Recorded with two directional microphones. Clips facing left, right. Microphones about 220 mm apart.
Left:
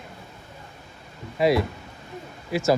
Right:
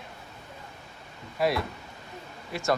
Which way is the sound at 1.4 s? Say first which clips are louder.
Left 6 dB; centre (ahead or behind).